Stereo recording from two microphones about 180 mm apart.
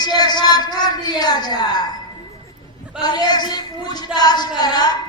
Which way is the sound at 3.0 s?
25° left (ahead or behind).